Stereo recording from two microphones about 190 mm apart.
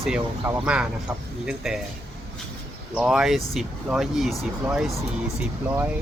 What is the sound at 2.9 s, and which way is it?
Speech, centre (ahead or behind).